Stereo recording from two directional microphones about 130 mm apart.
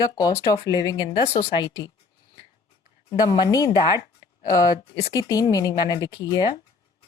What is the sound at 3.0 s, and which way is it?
Speech, 30° left (ahead or behind).